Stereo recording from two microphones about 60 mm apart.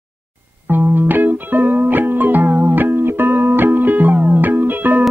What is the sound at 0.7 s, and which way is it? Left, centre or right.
Music, right.